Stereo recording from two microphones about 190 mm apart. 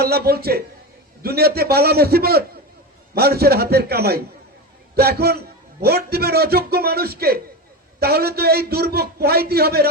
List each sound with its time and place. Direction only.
0.0 s a man's voice: 55° right (ahead or behind)